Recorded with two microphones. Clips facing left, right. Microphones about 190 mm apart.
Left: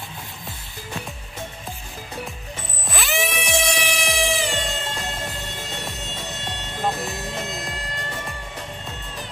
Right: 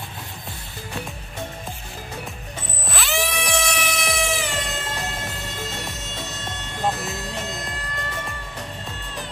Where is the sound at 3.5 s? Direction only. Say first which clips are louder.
Left 3 dB; 30° left (ahead or behind).